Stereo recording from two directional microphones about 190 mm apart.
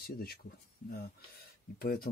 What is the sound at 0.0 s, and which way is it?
Speech, 55° left (ahead or behind).